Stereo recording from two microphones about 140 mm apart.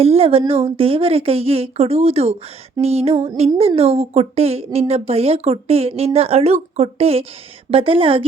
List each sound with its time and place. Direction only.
0.0 s a woman's voice: 45° right (ahead or behind)